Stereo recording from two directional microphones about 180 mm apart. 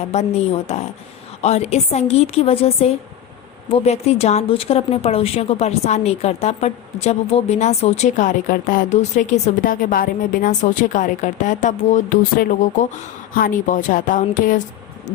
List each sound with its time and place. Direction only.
0.1 s a woman's voice: 35° left (ahead or behind)